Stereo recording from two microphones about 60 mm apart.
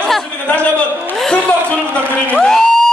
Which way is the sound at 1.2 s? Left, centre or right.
Centre.